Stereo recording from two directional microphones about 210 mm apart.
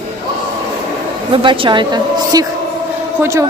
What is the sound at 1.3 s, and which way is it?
A woman's voice, 25° right (ahead or behind).